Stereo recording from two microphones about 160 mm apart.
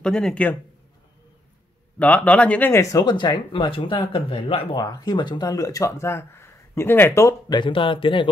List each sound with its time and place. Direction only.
0.0 s speech: 5° left (ahead or behind)
2.0 s speech: 10° left (ahead or behind); by 8.3 s 30° left (ahead or behind)